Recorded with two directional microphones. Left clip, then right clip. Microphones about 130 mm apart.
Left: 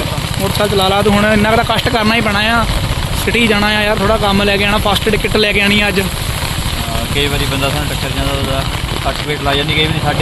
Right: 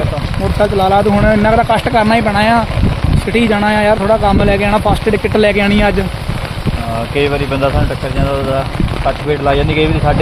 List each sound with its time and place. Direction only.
0.6 s speech: 10° right (ahead or behind)